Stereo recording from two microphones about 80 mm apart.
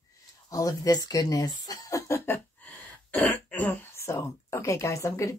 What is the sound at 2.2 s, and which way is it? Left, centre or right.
Throat clearing, centre.